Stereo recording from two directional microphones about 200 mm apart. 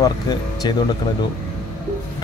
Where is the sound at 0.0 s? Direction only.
20° left (ahead or behind).